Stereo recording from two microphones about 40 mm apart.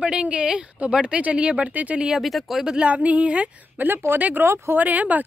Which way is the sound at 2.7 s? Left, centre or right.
Right.